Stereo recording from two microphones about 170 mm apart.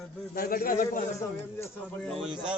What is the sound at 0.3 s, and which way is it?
Speech, 60° left (ahead or behind).